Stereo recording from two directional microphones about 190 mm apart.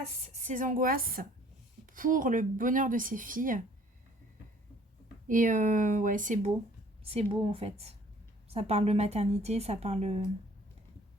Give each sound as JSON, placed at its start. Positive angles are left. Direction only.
{"t": 0.4, "sound": "speech", "side_deg": -45}
{"t": 5.3, "sound": "speech", "side_deg": -45}
{"t": 7.0, "sound": "a woman's voice", "side_deg": -30}